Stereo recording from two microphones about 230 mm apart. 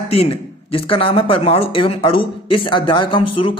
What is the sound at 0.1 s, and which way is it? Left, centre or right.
Speech, left.